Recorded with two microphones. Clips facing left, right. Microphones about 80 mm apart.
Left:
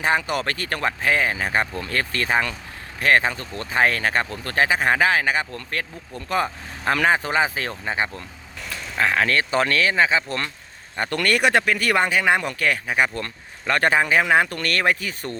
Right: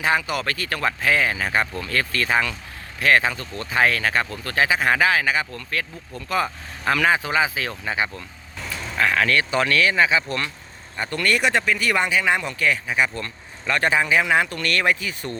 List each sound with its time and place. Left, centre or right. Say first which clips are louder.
0.0 s speech: even; left
7.7 s speech: even; left
11.1 s speech: left 2 dB; left